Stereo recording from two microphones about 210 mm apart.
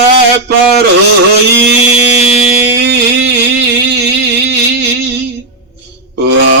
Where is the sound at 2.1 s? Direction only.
55° right (ahead or behind).